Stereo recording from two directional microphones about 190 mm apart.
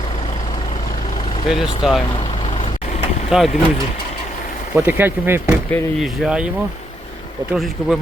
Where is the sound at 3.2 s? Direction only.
Centre (ahead or behind).